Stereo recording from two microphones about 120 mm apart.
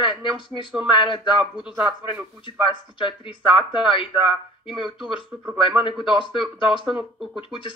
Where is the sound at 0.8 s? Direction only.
45° left (ahead or behind).